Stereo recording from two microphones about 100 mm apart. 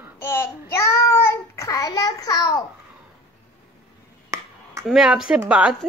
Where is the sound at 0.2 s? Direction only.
25° left (ahead or behind).